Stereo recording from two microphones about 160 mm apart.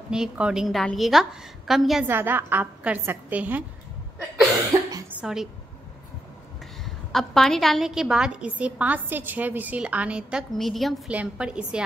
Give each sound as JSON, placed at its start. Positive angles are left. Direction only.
{"t": 0.1, "sound": "a woman's voice", "side_deg": -5}
{"t": 2.0, "sound": "a woman's voice", "side_deg": -15}
{"t": 4.7, "sound": "speech", "side_deg": -20}
{"t": 5.2, "sound": "a woman's voice", "side_deg": 0}
{"t": 6.8, "sound": "a woman's voice", "side_deg": 0}